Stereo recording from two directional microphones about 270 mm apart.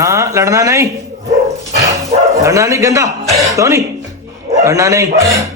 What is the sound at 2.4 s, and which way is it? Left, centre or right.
Speech, centre.